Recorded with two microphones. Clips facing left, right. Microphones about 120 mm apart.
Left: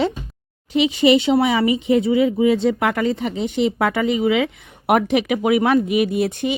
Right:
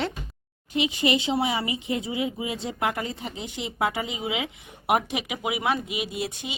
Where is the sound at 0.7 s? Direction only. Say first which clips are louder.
Left 9 dB; 80° left.